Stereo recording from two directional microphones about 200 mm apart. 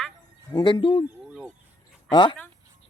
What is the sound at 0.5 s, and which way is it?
Speech, 20° left (ahead or behind).